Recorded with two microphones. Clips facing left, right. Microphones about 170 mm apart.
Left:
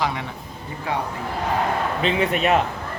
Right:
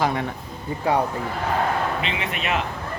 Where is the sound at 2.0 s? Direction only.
40° left (ahead or behind).